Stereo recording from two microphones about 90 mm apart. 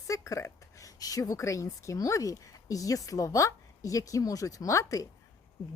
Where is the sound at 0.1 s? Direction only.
35° left (ahead or behind).